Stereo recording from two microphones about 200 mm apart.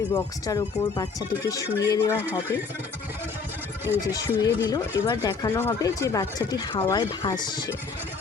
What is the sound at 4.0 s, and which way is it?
A woman's voice, 15° left (ahead or behind).